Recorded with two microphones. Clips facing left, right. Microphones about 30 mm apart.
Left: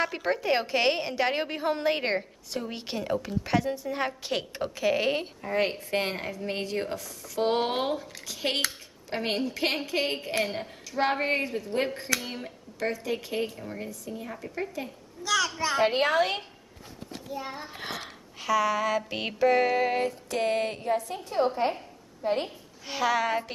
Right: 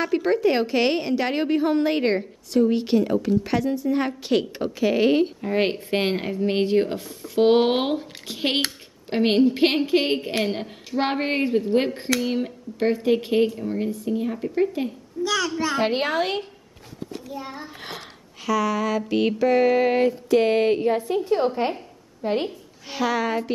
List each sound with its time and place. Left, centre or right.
0.0 s a woman's voice: centre
5.5 s a woman's voice: right
12.1 s a woman's voice: centre
12.7 s a woman's voice: right
14.4 s a woman's voice: right
15.2 s a woman's voice: centre
19.8 s a woman's voice: centre
22.8 s a woman's voice: centre